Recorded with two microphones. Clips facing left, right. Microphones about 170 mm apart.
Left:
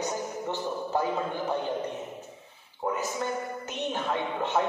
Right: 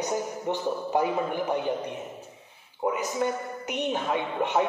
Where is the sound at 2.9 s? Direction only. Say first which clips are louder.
Right 3 dB; 15° right (ahead or behind).